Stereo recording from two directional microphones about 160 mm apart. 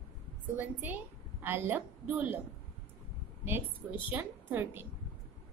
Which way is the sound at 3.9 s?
10° right (ahead or behind).